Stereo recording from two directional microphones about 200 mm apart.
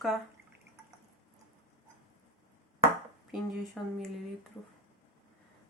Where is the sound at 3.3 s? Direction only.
Centre (ahead or behind).